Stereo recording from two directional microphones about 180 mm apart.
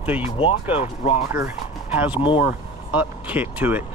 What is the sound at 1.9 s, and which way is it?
Speech, 10° right (ahead or behind).